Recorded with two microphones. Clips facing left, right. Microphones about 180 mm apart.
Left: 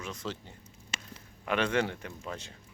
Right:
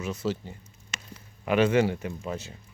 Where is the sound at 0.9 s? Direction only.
30° left (ahead or behind).